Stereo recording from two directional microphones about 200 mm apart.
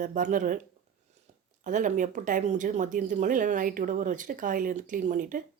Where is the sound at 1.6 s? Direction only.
40° right (ahead or behind).